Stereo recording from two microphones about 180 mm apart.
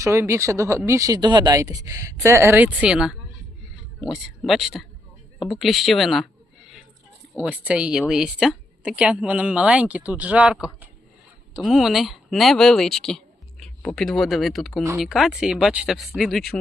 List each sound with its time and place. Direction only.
0.0 s speech: 15° right (ahead or behind); by 6.2 s centre (ahead or behind)
7.4 s speech: 10° right (ahead or behind)